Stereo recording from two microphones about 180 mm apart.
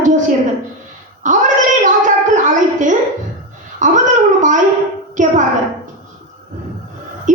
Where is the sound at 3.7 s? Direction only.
45° right (ahead or behind).